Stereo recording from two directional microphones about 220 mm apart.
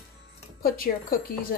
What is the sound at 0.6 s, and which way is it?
Speech, 40° left (ahead or behind).